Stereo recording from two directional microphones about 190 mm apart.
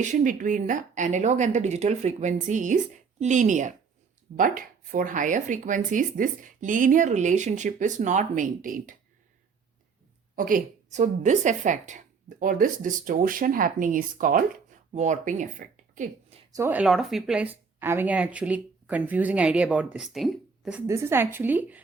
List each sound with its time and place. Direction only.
0.0 s a woman's voice: 40° right (ahead or behind)
10.3 s a woman's voice: 45° right (ahead or behind)
16.6 s a woman's voice: 10° right (ahead or behind)